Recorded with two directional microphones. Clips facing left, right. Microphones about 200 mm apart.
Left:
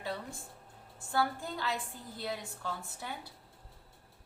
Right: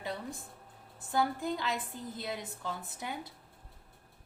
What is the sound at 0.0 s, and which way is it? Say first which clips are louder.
Music: right 1 dB; 20° right (ahead or behind).